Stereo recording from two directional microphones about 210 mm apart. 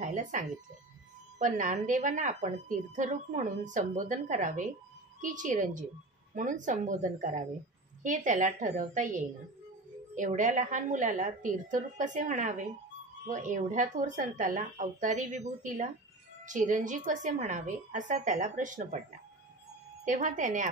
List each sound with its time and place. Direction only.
0.0 s a sound: 35° right (ahead or behind)
1.4 s a woman's voice: 35° right (ahead or behind)
20.1 s a woman's voice: 35° right (ahead or behind)